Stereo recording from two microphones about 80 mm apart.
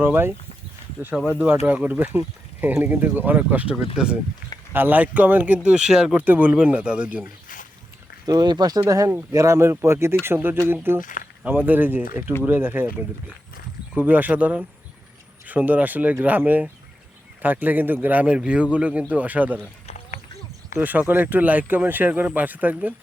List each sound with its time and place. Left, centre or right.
0.0 s speech: right
1.4 s speech: right
4.7 s speech: right; by 6.1 s centre
6.1 s speech: right
8.3 s speech: right
8.9 s speech: right
13.9 s speech: right
20.7 s speech: right